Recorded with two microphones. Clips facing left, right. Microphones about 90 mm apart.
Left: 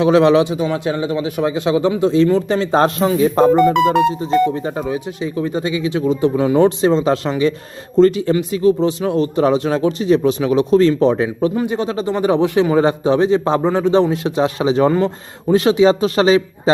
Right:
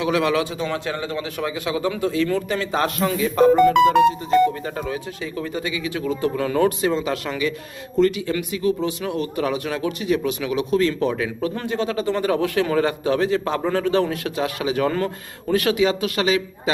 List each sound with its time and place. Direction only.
0.0 s a man's voice: 30° left (ahead or behind)